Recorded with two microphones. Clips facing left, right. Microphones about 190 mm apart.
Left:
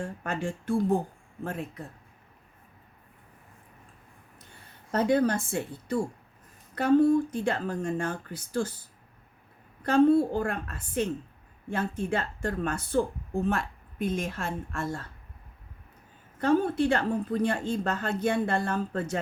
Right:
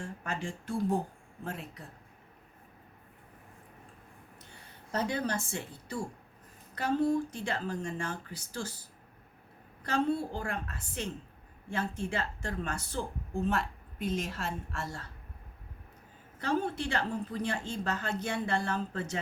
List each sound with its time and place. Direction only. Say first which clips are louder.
0.0 s a woman's voice: left 5 dB; 60° left (ahead or behind)
4.9 s a woman's voice: left 8 dB; 55° left (ahead or behind)
9.8 s a woman's voice: left 10 dB; 55° left (ahead or behind)
16.4 s a woman's voice: left 8 dB; 55° left (ahead or behind)